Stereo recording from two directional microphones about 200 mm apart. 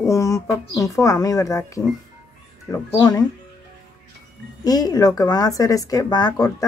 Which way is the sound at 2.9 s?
20° left (ahead or behind).